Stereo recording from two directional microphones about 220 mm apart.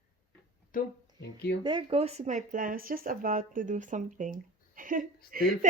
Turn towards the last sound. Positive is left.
turn(degrees=-40)  # may be behind; listen again after turning